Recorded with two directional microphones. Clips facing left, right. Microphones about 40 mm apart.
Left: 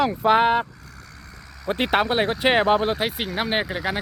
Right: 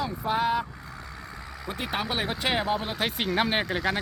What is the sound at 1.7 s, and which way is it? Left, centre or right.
Speech, left.